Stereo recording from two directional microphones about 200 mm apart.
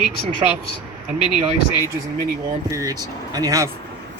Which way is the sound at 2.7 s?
15° right (ahead or behind).